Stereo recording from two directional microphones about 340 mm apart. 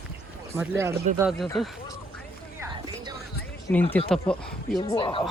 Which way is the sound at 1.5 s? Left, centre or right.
Centre.